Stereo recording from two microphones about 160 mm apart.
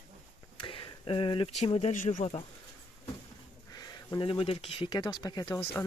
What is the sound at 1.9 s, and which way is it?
Speech, 55° left (ahead or behind).